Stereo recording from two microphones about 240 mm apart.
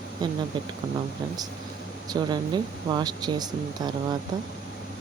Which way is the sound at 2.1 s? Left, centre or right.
Centre.